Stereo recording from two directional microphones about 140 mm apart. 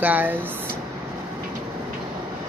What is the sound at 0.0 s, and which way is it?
Speech, 15° right (ahead or behind).